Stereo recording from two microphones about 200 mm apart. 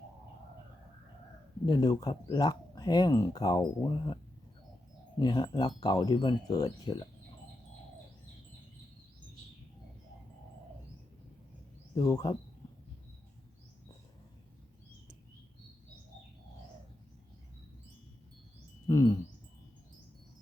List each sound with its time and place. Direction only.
1.6 s speech: 20° left (ahead or behind)
5.2 s speech: 20° left (ahead or behind)
11.9 s speech: 20° left (ahead or behind)
18.9 s bird: 15° left (ahead or behind)